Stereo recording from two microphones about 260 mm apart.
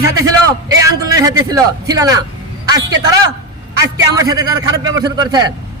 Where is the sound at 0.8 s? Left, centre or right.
Centre.